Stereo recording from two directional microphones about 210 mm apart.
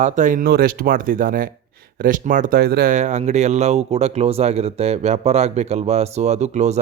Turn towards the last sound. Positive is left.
turn(degrees=-30)  # may be behind; listen again after turning